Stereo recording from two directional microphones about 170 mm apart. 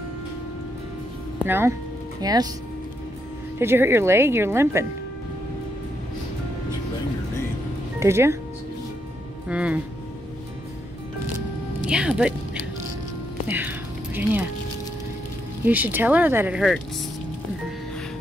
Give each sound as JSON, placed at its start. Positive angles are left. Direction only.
{"t": 1.4, "sound": "speech", "side_deg": -15}
{"t": 3.5, "sound": "speech", "side_deg": -15}
{"t": 8.0, "sound": "speech", "side_deg": -15}
{"t": 9.5, "sound": "speech", "side_deg": -5}
{"t": 11.8, "sound": "speech", "side_deg": -5}
{"t": 13.5, "sound": "music", "side_deg": -10}
{"t": 15.6, "sound": "speech", "side_deg": -10}